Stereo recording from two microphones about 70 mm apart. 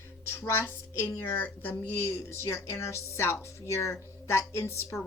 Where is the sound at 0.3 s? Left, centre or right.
Left.